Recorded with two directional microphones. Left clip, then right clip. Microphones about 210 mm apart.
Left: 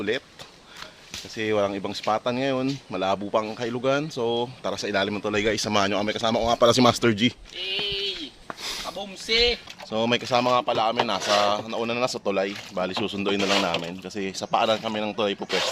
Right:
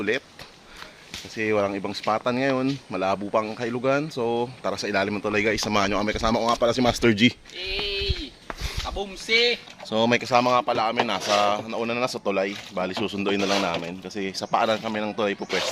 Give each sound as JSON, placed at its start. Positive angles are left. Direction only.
{"t": 1.4, "sound": "speech", "side_deg": -5}
{"t": 6.6, "sound": "speech", "side_deg": 55}
{"t": 7.0, "sound": "speech", "side_deg": 0}
{"t": 7.5, "sound": "a sound", "side_deg": 0}
{"t": 9.2, "sound": "speech", "side_deg": 10}
{"t": 9.9, "sound": "speech", "side_deg": -15}
{"t": 13.4, "sound": "speech", "side_deg": 10}